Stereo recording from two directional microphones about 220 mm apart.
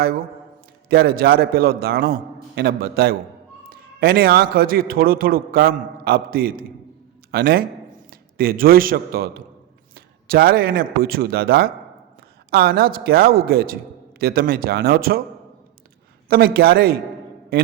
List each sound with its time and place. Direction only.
0.9 s a woman's voice: 45° right (ahead or behind)
16.3 s a woman's voice: 45° right (ahead or behind)